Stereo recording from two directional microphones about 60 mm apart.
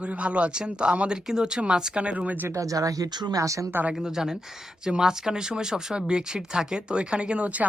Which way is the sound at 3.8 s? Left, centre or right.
Centre.